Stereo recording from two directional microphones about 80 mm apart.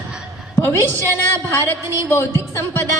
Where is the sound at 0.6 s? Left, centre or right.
Left.